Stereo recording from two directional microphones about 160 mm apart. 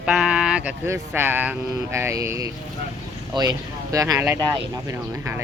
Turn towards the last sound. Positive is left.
turn(degrees=-20)  # may be behind; listen again after turning